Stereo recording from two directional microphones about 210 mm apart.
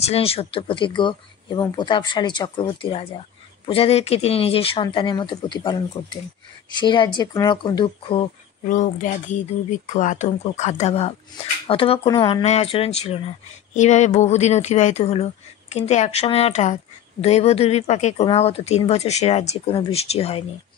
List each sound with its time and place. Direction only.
0.0 s speech: 30° left (ahead or behind)
8.6 s speech: 40° left (ahead or behind)